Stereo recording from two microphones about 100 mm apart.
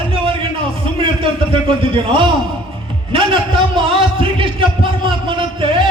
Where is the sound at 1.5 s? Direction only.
60° right (ahead or behind).